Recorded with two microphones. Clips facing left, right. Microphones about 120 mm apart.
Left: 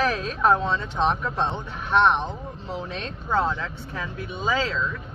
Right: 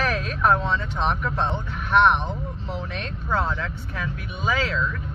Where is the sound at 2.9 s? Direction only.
30° left (ahead or behind).